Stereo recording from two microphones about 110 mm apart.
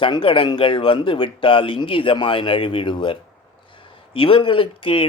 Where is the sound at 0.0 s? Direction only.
50° left (ahead or behind).